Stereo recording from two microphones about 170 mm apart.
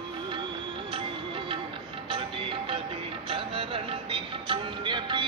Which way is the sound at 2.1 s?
30° right (ahead or behind).